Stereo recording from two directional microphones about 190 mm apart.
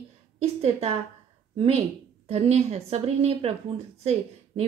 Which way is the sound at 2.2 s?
35° right (ahead or behind).